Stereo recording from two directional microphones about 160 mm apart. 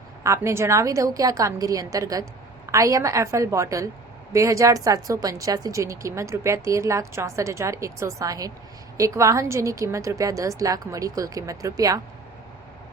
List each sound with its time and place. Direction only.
0.2 s a woman's voice: 20° right (ahead or behind)